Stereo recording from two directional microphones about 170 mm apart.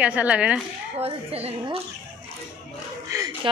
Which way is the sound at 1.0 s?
35° right (ahead or behind).